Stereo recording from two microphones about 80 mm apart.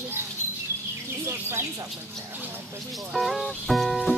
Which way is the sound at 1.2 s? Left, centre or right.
Right.